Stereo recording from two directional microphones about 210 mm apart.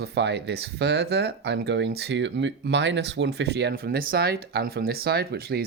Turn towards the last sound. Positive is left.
turn(degrees=-50)  # may be behind; listen again after turning